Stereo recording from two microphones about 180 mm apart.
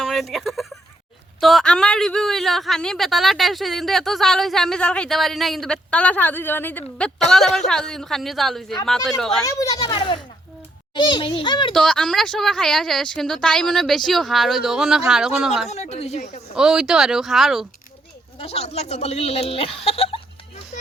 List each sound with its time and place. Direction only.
0.0 s a man's voice: centre (ahead or behind)
9.4 s a child's voice: 20° left (ahead or behind)
11.7 s a man's voice: 5° left (ahead or behind)
15.7 s a woman's voice: 35° left (ahead or behind)
16.6 s a man's voice: 5° right (ahead or behind)
18.3 s a woman's voice: 35° left (ahead or behind)